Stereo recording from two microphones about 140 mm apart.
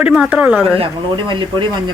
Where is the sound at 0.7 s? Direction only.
40° right (ahead or behind).